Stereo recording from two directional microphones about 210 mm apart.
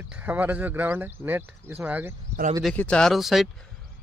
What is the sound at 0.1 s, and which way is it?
Speech, 10° right (ahead or behind).